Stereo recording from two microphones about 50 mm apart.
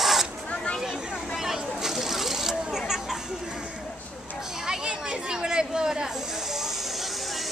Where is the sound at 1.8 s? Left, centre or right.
Centre.